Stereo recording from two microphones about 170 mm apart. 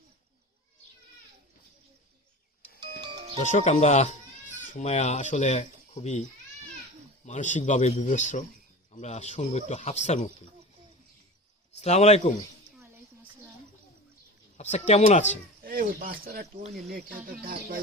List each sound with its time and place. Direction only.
3.0 s music: 25° right (ahead or behind)
3.5 s speech: 45° left (ahead or behind)
7.3 s a man's voice: 45° left (ahead or behind)
11.8 s a man's voice: 40° left (ahead or behind)
14.6 s a man's voice: 40° left (ahead or behind)
15.6 s speech: 60° right (ahead or behind)